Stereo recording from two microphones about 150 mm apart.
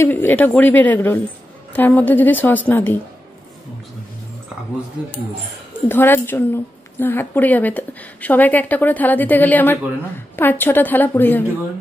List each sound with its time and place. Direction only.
0.0 s a woman's voice: 15° left (ahead or behind)
5.7 s a woman's voice: 15° left (ahead or behind)